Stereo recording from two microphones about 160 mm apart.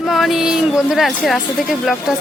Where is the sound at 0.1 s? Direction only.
Centre (ahead or behind).